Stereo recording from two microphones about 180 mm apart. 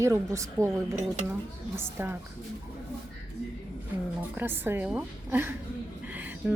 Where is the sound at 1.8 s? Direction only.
10° right (ahead or behind).